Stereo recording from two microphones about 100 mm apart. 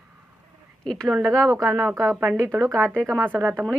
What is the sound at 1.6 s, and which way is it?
Speech, centre (ahead or behind).